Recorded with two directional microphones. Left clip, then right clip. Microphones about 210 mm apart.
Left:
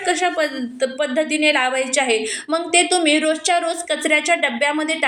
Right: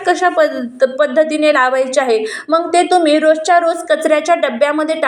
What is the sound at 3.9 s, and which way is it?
A woman's voice, centre (ahead or behind).